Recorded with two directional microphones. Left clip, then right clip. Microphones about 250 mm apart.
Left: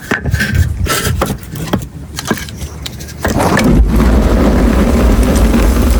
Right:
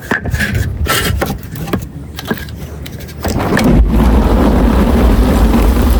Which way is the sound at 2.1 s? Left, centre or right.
Left.